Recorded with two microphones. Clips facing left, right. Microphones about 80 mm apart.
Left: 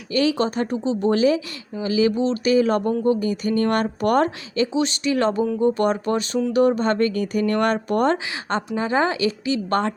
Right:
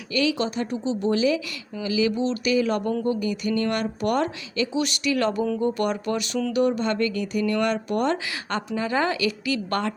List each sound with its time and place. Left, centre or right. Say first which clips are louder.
0.1 s speech: left 4 dB; left